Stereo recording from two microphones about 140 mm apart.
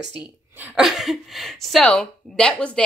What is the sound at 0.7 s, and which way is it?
Speech, centre (ahead or behind).